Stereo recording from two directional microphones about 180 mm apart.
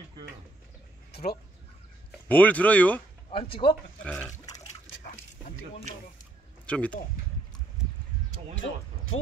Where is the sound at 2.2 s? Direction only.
10° left (ahead or behind).